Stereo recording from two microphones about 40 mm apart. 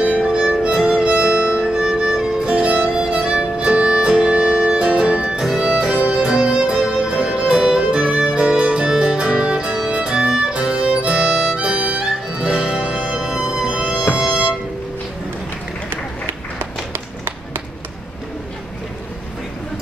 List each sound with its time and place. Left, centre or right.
0.0 s music: right
6.8 s music: centre
7.2 s music: right
9.8 s violin: right
10.1 s violin: centre
10.7 s music: right
11.5 s music: right
16.5 s tap: right